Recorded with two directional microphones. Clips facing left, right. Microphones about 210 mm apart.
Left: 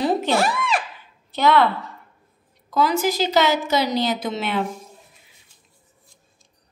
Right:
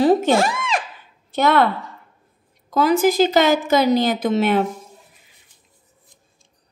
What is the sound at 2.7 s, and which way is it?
A woman's voice, 50° right (ahead or behind).